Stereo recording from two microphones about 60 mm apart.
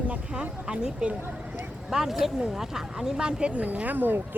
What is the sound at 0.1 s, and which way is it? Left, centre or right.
Speech, centre.